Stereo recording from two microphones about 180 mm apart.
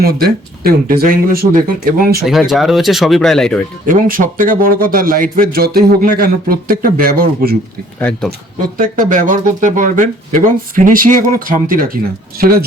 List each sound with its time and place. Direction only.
0.0 s speech: 60° right (ahead or behind)
2.5 s speech: centre (ahead or behind)
3.8 s a man's voice: 50° right (ahead or behind)
8.1 s speech: 5° left (ahead or behind)
8.8 s a man's voice: 50° right (ahead or behind)